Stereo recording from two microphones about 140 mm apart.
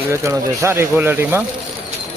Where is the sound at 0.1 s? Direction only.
20° right (ahead or behind).